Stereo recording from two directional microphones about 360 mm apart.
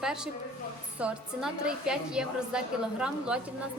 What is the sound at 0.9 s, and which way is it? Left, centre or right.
A woman's voice, centre.